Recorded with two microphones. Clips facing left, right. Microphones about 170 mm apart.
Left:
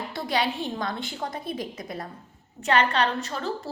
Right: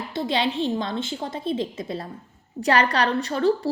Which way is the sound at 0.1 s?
25° right (ahead or behind).